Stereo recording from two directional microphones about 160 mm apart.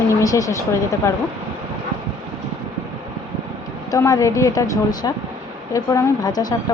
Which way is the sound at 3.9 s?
20° left (ahead or behind).